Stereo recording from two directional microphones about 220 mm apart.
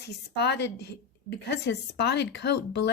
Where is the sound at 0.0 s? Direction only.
50° left (ahead or behind).